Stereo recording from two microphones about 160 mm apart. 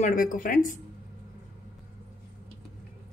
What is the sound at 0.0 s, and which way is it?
Speech, 60° left (ahead or behind).